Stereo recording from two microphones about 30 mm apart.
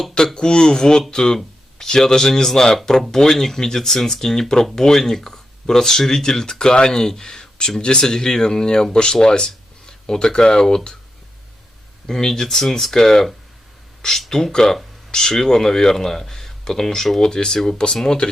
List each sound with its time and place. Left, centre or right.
0.3 s speech: left
12.0 s speech: centre
14.3 s speech: centre